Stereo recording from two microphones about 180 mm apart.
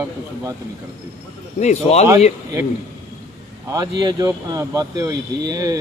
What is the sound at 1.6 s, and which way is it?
Speech, 40° left (ahead or behind).